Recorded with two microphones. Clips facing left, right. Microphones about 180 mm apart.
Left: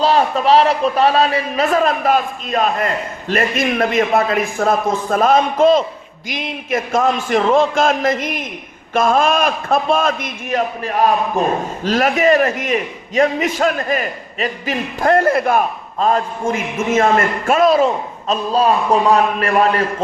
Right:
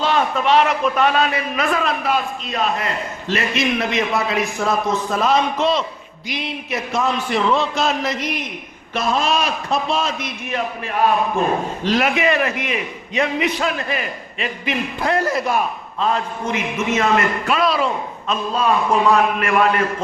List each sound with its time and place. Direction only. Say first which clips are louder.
0.0 s a man's voice: left 4 dB; 35° left (ahead or behind)